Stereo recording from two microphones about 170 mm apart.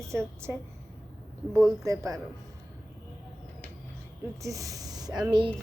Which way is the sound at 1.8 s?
20° right (ahead or behind).